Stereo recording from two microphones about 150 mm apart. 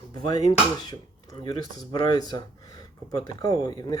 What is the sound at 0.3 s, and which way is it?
Speech, 25° left (ahead or behind).